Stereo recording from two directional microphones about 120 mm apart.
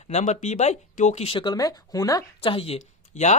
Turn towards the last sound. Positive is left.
turn(degrees=70)  # may be behind; listen again after turning